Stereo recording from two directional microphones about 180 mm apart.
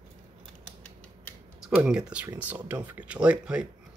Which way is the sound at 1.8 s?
5° right (ahead or behind).